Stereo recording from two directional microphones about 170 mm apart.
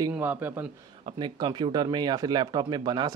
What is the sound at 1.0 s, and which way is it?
Speech, 25° right (ahead or behind).